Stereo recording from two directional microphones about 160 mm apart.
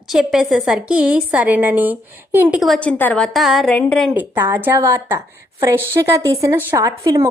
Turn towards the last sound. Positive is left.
turn(degrees=-20)  # may be behind; listen again after turning